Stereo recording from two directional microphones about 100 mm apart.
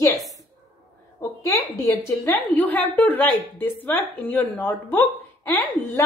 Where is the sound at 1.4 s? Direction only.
35° left (ahead or behind).